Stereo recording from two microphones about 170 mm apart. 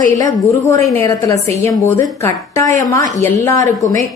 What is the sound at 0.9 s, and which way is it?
A man's voice, 20° left (ahead or behind).